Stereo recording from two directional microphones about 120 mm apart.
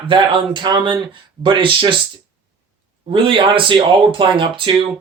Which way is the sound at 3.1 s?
45° right (ahead or behind).